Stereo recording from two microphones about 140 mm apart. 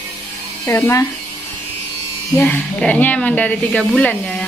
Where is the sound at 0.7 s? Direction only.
20° left (ahead or behind).